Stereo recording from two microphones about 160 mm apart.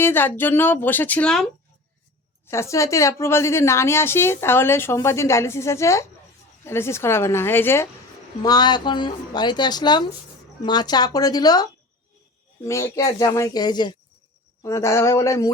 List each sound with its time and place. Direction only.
0.0 s a woman's voice: 15° left (ahead or behind)
2.5 s a woman's voice: 15° left (ahead or behind)
8.4 s speech: 25° left (ahead or behind)